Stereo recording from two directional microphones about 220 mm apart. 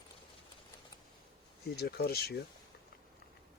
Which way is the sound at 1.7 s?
45° left (ahead or behind).